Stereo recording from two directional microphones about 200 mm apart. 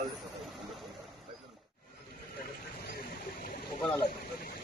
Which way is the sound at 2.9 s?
50° left (ahead or behind).